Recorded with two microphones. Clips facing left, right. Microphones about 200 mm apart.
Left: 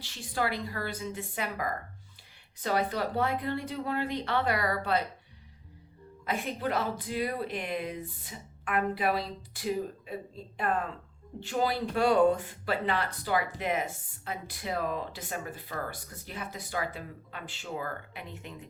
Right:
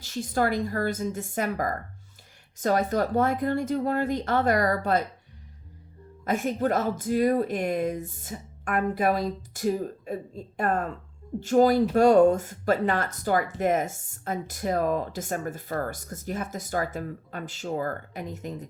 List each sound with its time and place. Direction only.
0.0 s speech: 45° right (ahead or behind)
6.2 s speech: 45° right (ahead or behind)